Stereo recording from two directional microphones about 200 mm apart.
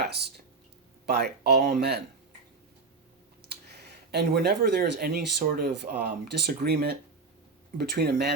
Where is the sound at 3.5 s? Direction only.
55° right (ahead or behind).